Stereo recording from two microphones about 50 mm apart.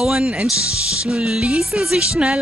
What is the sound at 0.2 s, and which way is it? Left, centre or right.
Speech, centre.